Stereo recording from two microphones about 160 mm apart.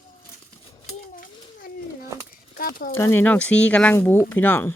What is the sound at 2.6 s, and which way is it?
Speech, 65° left (ahead or behind).